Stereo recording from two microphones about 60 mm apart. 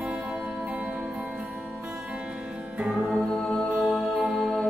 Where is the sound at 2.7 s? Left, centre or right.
Centre.